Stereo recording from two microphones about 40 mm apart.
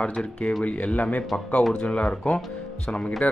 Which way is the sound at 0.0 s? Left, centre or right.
Left.